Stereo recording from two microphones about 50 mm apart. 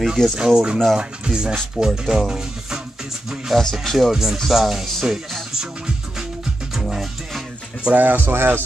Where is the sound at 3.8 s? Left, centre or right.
Centre.